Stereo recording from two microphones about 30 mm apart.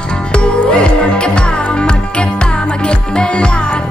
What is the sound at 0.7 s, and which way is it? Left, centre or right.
Music, left.